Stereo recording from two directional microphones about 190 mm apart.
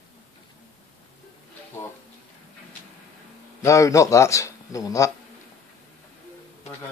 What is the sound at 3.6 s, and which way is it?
Speech, 15° left (ahead or behind).